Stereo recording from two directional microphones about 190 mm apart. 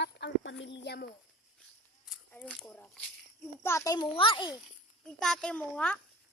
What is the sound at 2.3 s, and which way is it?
A child's voice, 5° left (ahead or behind).